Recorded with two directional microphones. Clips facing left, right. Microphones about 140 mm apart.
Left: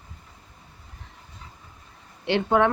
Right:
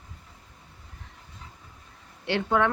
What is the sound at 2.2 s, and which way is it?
Speech, 20° left (ahead or behind).